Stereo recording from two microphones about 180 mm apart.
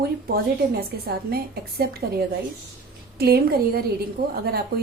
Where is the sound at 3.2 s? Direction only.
60° right (ahead or behind).